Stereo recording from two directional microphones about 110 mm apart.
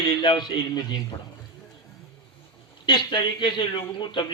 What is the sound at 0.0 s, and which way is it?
A man's voice, 45° left (ahead or behind).